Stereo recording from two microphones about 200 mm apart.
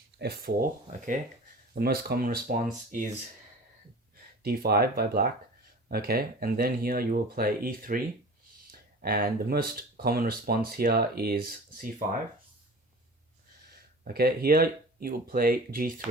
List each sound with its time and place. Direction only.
0.2 s speech: 50° right (ahead or behind)
1.7 s speech: 50° right (ahead or behind)
4.4 s speech: 50° right (ahead or behind)
14.0 s speech: 50° right (ahead or behind)